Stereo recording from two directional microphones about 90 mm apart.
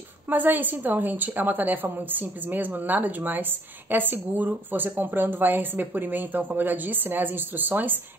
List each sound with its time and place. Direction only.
0.3 s a woman's voice: 20° right (ahead or behind)